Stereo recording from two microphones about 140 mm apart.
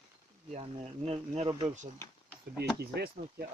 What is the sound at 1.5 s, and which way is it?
Speech, 30° right (ahead or behind).